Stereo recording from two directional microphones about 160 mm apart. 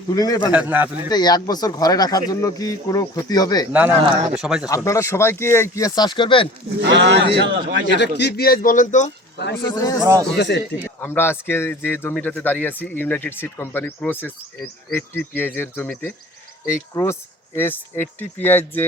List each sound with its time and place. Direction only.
0.1 s speech: 25° left (ahead or behind)
0.5 s a man's voice: 10° right (ahead or behind)
1.1 s speech: 25° left (ahead or behind)
3.7 s a man's voice: 10° right (ahead or behind)
4.6 s speech: 20° left (ahead or behind)
6.8 s speech: 90° right
7.9 s a man's voice: 90° left; by 9.0 s 50° left (ahead or behind)
9.7 s speech: 20° left (ahead or behind)
10.0 s speech: 20° right (ahead or behind)
10.3 s speech: 90° left
10.8 s speech: 15° left (ahead or behind)